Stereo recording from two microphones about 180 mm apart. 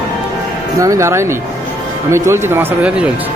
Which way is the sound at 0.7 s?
20° right (ahead or behind).